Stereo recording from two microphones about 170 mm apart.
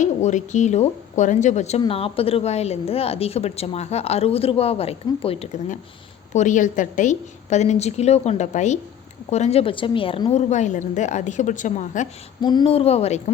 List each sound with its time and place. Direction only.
0.0 s a woman's voice: 45° left (ahead or behind)
6.3 s a woman's voice: 45° left (ahead or behind); by 10.3 s 30° left (ahead or behind)
10.3 s a woman's voice: 45° left (ahead or behind)
12.4 s a woman's voice: 25° left (ahead or behind); by 13.3 s 40° left (ahead or behind)